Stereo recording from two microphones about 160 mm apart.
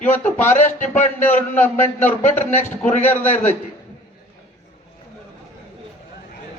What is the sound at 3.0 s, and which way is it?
Speech, 10° left (ahead or behind).